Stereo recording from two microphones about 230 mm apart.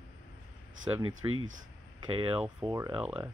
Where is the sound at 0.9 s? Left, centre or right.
Centre.